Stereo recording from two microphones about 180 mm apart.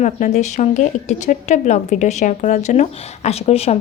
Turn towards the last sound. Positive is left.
turn(degrees=35)  # may be behind; listen again after turning